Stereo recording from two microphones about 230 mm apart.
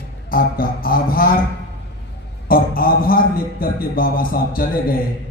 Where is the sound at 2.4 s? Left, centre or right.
Left.